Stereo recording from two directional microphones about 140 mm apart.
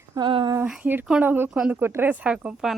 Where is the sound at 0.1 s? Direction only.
35° right (ahead or behind).